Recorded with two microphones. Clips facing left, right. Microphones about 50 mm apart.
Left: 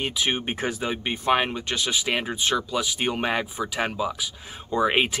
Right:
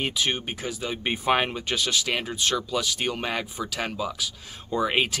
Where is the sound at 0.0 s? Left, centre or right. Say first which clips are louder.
Left 1 dB; centre.